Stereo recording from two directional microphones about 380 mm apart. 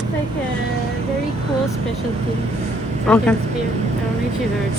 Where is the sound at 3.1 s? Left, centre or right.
Centre.